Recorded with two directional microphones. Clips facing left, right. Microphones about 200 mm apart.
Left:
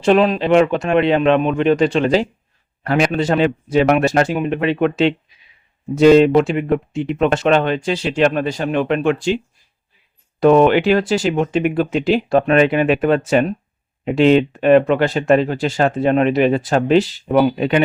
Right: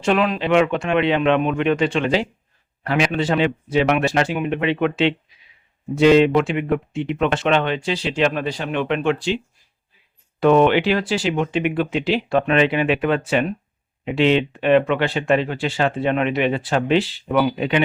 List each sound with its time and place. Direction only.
0.0 s speech: 35° left (ahead or behind)
10.4 s speech: 40° left (ahead or behind)